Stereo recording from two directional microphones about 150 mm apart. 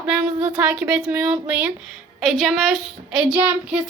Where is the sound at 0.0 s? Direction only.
5° right (ahead or behind).